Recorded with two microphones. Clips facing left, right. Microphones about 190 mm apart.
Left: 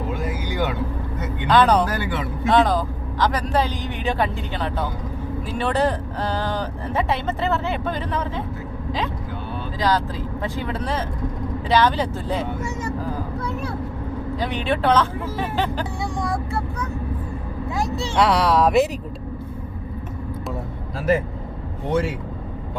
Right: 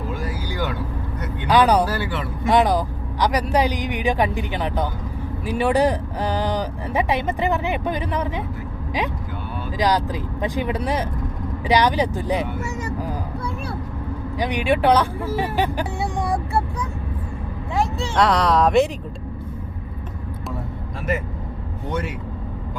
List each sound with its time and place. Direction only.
0.2 s vehicle: 20° left (ahead or behind)
1.5 s speech: 10° right (ahead or behind)
9.7 s speech: 15° right (ahead or behind)
14.3 s speech: 15° right (ahead or behind)
16.2 s speech: 30° right (ahead or behind)
18.2 s speech: 5° left (ahead or behind)
21.8 s speech: 30° left (ahead or behind)